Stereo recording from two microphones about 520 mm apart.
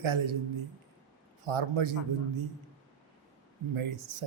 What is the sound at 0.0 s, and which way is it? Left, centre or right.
Speech, right.